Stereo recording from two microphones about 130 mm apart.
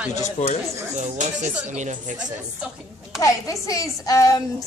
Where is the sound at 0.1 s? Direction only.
65° left (ahead or behind).